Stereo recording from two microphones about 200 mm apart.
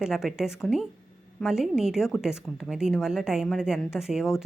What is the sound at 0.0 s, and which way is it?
A woman's voice, centre (ahead or behind).